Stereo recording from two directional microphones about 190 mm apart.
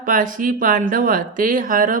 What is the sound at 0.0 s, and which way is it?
Speech, 45° right (ahead or behind).